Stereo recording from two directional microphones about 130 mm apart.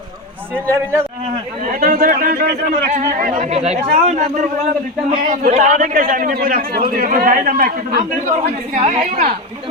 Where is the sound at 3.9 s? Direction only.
65° right (ahead or behind).